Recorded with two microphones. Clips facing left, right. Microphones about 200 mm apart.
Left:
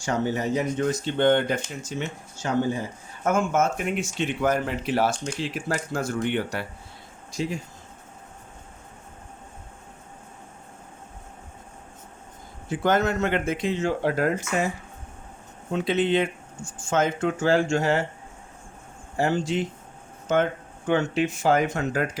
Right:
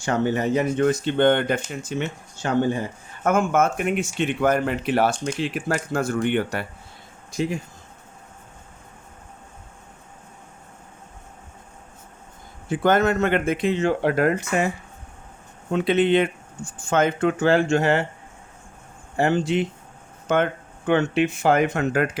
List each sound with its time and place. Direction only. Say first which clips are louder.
0.0 s speech: right 3 dB; 60° right (ahead or behind)
12.8 s speech: right 3 dB; 55° right (ahead or behind)
15.7 s speech: right 4 dB; 60° right (ahead or behind)
19.1 s speech: right 3 dB; 60° right (ahead or behind)